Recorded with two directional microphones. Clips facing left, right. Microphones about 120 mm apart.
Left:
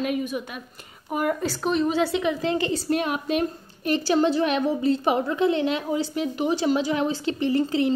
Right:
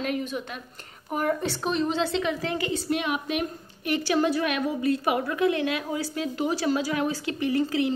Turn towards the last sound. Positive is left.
turn(degrees=30)  # may be behind; listen again after turning